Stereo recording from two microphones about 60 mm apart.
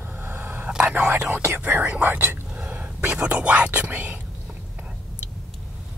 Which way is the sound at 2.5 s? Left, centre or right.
Right.